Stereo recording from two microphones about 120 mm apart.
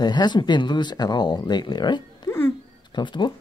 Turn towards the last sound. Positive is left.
turn(degrees=40)  # may be behind; listen again after turning